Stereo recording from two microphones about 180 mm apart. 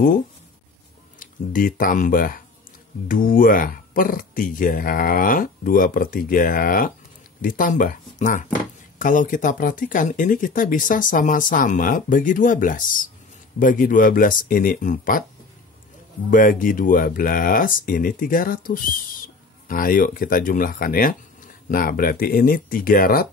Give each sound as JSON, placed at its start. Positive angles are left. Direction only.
{"t": 1.2, "sound": "speech", "side_deg": 50}
{"t": 16.3, "sound": "speech", "side_deg": 50}